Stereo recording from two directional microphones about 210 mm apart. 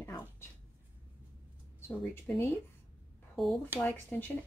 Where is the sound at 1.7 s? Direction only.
10° left (ahead or behind).